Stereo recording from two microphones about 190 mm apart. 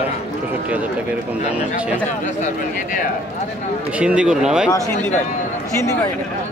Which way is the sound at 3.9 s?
5° right (ahead or behind).